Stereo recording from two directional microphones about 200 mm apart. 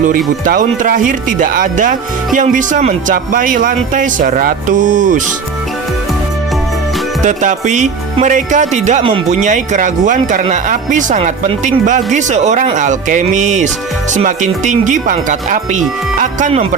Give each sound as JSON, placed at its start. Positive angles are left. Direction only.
{"t": 0.4, "sound": "speech", "side_deg": -40}
{"t": 7.2, "sound": "speech", "side_deg": -40}